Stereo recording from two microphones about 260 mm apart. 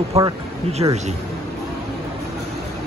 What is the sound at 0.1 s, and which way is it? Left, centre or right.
Speech, right.